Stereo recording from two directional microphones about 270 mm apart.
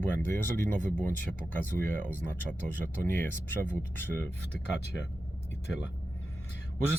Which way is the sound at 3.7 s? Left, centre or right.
Centre.